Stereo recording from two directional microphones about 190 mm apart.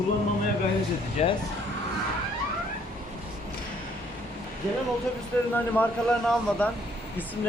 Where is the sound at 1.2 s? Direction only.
35° left (ahead or behind).